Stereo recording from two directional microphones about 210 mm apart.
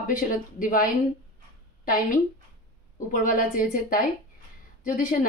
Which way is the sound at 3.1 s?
40° left (ahead or behind).